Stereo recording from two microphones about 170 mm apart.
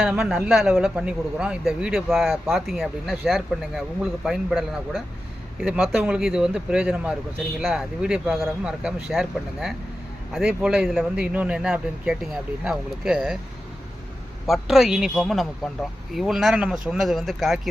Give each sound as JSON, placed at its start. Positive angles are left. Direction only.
{"t": 0.0, "sound": "a man's voice", "side_deg": 0}
{"t": 14.4, "sound": "a man's voice", "side_deg": 0}